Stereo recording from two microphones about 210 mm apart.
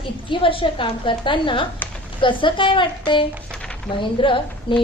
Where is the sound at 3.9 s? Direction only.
25° left (ahead or behind).